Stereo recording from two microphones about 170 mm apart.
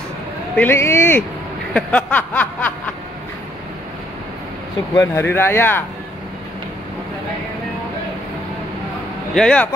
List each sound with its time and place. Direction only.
0.6 s speech: 15° left (ahead or behind)
1.7 s snicker: 5° left (ahead or behind)
4.9 s speech: 15° left (ahead or behind)
9.3 s speech: 5° left (ahead or behind)